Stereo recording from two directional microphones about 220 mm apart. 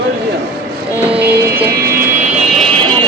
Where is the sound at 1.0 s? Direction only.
5° right (ahead or behind).